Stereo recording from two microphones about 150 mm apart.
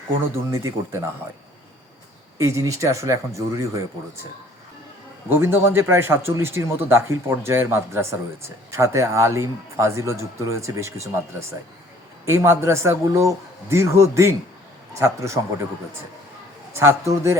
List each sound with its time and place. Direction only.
0.5 s a man's voice: 20° right (ahead or behind)
2.4 s a man's voice: 20° right (ahead or behind)
5.3 s a man's voice: 15° right (ahead or behind)
16.7 s a man's voice: 20° right (ahead or behind)